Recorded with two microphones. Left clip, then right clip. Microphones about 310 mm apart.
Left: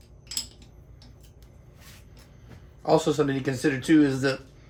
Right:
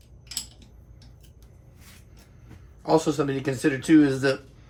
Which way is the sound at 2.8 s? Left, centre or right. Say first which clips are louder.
Even; centre.